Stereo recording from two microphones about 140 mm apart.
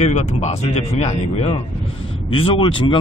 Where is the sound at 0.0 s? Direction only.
55° left (ahead or behind).